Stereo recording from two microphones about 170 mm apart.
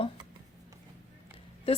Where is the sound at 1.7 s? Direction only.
35° left (ahead or behind).